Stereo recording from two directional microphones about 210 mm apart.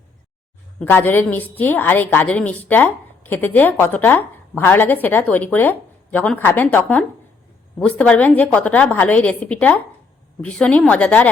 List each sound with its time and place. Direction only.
0.8 s a woman's voice: 10° left (ahead or behind)